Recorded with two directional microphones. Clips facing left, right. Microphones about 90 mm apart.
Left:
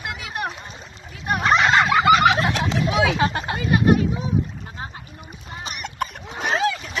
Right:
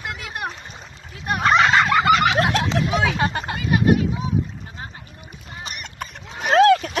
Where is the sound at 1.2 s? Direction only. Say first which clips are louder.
Right 1 dB; centre (ahead or behind).